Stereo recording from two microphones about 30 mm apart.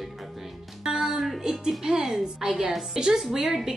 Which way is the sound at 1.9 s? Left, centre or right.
Right.